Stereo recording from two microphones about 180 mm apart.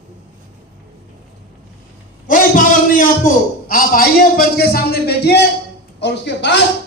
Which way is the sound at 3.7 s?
55° left (ahead or behind).